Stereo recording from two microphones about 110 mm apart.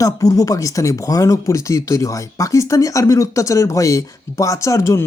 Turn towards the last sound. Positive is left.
turn(degrees=30)  # may be behind; listen again after turning